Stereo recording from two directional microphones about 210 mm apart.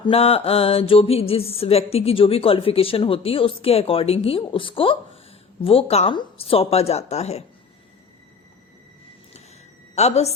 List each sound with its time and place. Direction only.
0.0 s a woman's voice: 25° left (ahead or behind)
9.9 s a woman's voice: 30° left (ahead or behind)